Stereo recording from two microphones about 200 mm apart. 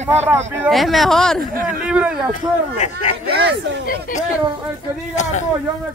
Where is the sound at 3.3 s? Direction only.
55° right (ahead or behind).